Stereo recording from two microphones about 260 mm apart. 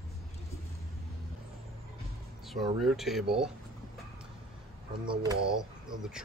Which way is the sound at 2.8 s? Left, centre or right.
Centre.